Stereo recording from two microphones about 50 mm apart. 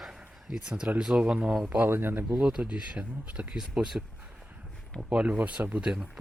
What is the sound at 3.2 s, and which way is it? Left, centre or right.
Speech, right.